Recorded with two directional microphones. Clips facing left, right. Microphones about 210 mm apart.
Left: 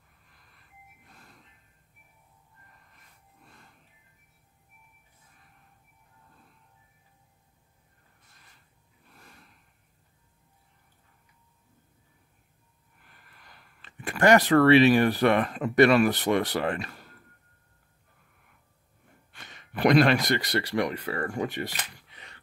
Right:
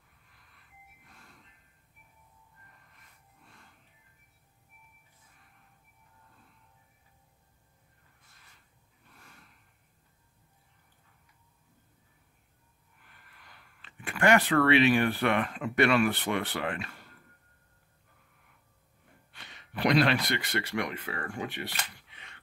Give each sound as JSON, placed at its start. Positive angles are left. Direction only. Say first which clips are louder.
{"t": 13.5, "sound": "speech", "louder": "left 2 dB", "side_deg": 40}
{"t": 19.3, "sound": "speech", "louder": "left 3 dB", "side_deg": 45}